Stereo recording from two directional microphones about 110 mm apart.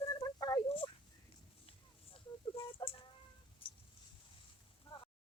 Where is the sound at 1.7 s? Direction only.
55° left (ahead or behind).